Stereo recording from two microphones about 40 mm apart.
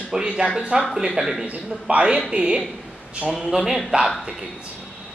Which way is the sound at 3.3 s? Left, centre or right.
Centre.